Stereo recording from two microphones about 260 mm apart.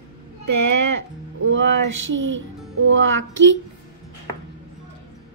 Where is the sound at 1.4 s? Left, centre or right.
Right.